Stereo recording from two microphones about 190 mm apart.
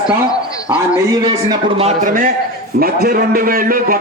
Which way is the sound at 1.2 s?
30° right (ahead or behind).